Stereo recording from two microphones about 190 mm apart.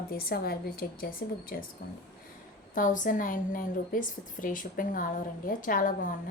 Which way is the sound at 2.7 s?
45° left (ahead or behind).